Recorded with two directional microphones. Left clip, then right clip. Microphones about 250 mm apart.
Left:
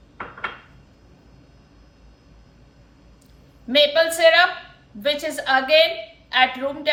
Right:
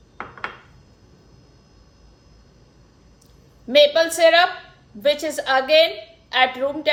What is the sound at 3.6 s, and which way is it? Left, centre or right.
A man's voice, right.